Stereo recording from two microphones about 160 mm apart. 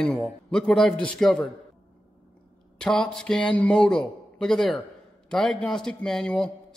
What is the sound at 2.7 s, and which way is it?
A man's voice, 5° left (ahead or behind).